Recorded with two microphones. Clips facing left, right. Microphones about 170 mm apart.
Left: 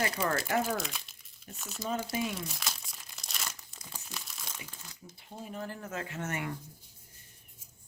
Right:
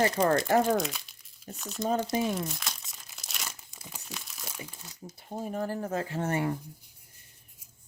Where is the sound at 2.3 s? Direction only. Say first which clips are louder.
Right 5 dB; centre (ahead or behind).